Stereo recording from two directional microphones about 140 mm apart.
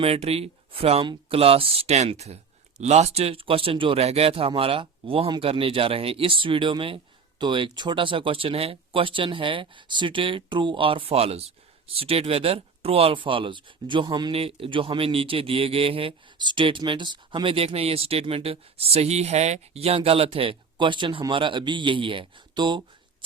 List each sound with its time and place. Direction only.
0.0 s speech: 45° right (ahead or behind)